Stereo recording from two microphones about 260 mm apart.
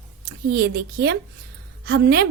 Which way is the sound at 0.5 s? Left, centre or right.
Right.